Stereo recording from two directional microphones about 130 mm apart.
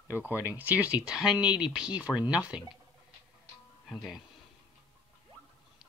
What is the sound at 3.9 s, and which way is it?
Speech, centre (ahead or behind).